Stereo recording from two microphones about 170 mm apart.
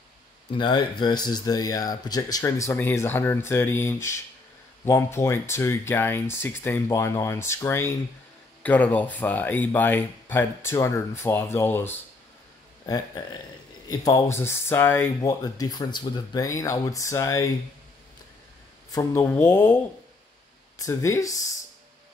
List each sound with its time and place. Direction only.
0.5 s speech: 25° left (ahead or behind)
18.9 s speech: 20° left (ahead or behind)
20.7 s speech: 20° left (ahead or behind)